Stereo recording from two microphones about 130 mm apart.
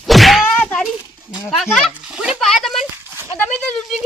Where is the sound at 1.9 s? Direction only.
5° right (ahead or behind).